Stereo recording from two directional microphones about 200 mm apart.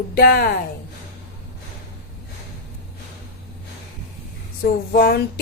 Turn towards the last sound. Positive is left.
turn(degrees=50)  # may be behind; listen again after turning